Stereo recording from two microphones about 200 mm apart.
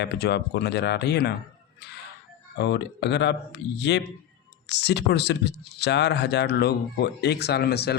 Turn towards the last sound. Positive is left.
turn(degrees=55)  # may be behind; listen again after turning